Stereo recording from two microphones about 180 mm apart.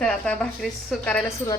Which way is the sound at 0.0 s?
5° left (ahead or behind).